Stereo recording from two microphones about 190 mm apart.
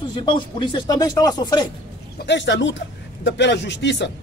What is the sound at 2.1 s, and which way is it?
A man's voice, 70° left (ahead or behind).